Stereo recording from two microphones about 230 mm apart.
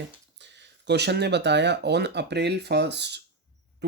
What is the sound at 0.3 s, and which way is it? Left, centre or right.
Speech, right.